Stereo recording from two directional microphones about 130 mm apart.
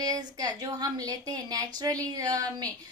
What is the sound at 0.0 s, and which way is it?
A woman's voice, 30° right (ahead or behind).